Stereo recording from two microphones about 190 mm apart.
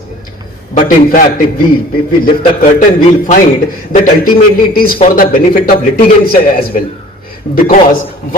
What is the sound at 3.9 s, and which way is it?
A man's voice, 45° left (ahead or behind).